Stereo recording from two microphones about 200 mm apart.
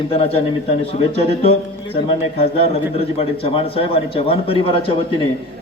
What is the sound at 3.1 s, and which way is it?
A man's voice, 30° left (ahead or behind).